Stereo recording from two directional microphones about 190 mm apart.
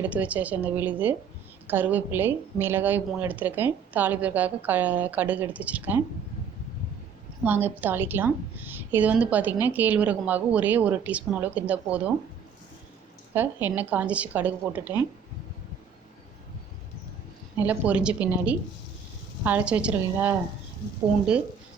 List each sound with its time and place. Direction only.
0.0 s a woman's voice: 10° right (ahead or behind)
7.4 s a woman's voice: 10° right (ahead or behind)
13.3 s a woman's voice: 10° right (ahead or behind)
17.6 s a woman's voice: 5° right (ahead or behind)